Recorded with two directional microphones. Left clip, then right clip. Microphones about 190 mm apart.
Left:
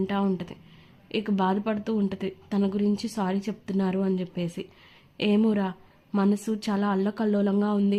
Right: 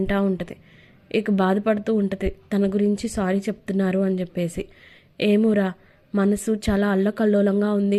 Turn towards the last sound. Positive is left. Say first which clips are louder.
# right 5 dB
turn(degrees=-5)  # may be behind; listen again after turning